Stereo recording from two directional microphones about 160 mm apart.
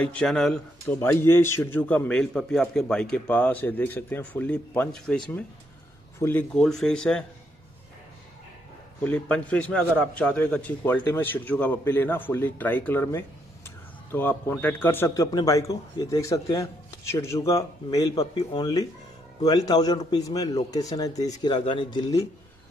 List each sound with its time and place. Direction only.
0.0 s speech: 5° left (ahead or behind)
0.9 s a man's voice: 15° left (ahead or behind)
9.0 s a man's voice: 10° left (ahead or behind); by 22.0 s 30° left (ahead or behind)